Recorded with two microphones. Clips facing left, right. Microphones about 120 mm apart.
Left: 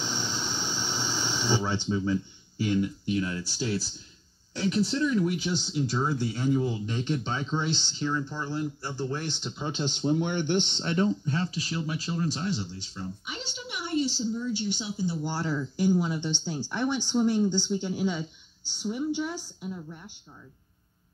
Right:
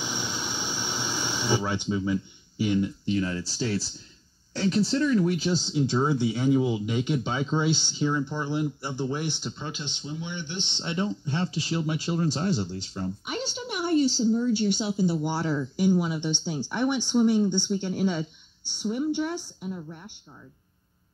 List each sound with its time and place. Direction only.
0.0 s a sound: 10° right (ahead or behind)
1.7 s speech: 10° right (ahead or behind)
3.1 s speech: 35° right (ahead or behind)
5.9 s speech: 10° right (ahead or behind)
9.8 s speech: 50° left (ahead or behind)
10.8 s speech: 20° right (ahead or behind)
12.9 s speech: 55° right (ahead or behind)
15.2 s speech: 10° right (ahead or behind)
17.6 s a woman's voice: centre (ahead or behind)